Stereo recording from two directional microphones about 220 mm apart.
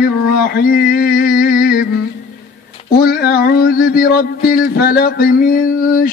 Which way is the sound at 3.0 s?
45° left (ahead or behind).